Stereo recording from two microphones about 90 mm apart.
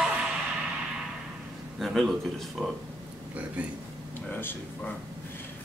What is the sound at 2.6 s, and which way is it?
Speech, 10° right (ahead or behind).